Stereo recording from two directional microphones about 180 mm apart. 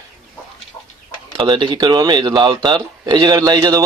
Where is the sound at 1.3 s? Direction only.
25° right (ahead or behind).